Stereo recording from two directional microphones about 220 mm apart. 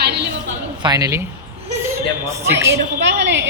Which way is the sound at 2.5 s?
10° right (ahead or behind).